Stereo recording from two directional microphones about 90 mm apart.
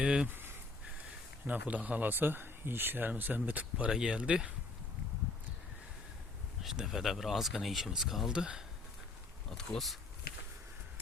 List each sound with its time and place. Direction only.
0.0 s speech: 10° right (ahead or behind)
0.3 s a sound: 25° right (ahead or behind)
1.5 s speech: 15° right (ahead or behind)
6.6 s speech: 5° right (ahead or behind)
9.5 s speech: 5° left (ahead or behind)